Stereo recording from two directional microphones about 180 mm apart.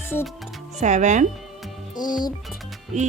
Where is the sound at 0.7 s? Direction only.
40° right (ahead or behind).